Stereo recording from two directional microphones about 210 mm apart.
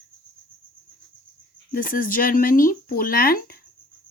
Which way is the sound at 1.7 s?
40° left (ahead or behind).